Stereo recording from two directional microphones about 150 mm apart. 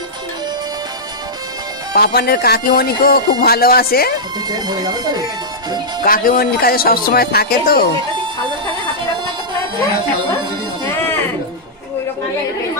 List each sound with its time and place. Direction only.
2.0 s speech: 90° left
4.5 s speech: 25° right (ahead or behind)
6.0 s speech: 75° left (ahead or behind)